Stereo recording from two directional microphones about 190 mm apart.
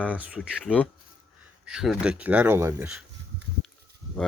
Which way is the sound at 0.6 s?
10° left (ahead or behind).